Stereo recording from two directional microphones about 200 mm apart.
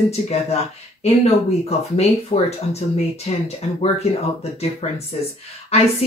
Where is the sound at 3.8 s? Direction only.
30° left (ahead or behind).